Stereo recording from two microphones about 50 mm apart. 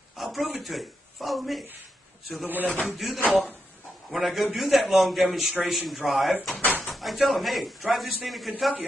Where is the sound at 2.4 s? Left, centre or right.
Right.